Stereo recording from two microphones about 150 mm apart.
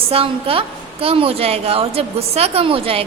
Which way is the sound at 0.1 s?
40° right (ahead or behind).